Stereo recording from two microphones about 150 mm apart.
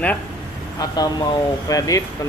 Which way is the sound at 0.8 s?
25° left (ahead or behind).